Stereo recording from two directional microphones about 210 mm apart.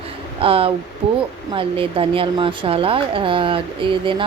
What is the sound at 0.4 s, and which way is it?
Speech, 25° right (ahead or behind).